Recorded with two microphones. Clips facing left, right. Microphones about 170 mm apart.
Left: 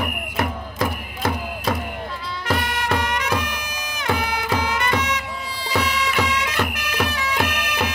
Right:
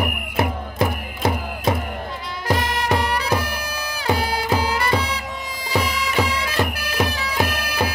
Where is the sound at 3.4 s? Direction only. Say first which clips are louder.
Right 2 dB; 35° right (ahead or behind).